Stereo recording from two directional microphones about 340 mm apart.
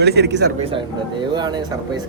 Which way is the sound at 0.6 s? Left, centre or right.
Centre.